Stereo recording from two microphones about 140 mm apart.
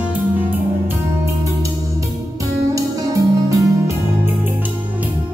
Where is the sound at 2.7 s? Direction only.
25° right (ahead or behind).